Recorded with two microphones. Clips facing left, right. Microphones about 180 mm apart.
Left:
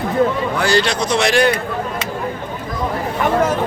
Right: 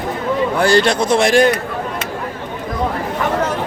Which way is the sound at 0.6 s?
50° right (ahead or behind).